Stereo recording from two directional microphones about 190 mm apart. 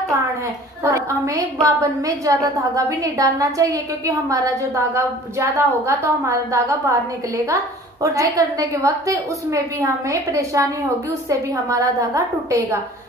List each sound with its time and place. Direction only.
0.8 s a woman's voice: 15° right (ahead or behind)